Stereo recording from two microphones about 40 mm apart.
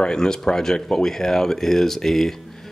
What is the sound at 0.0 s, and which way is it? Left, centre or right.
Speech, centre.